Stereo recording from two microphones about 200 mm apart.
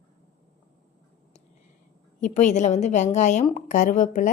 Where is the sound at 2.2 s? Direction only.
40° left (ahead or behind).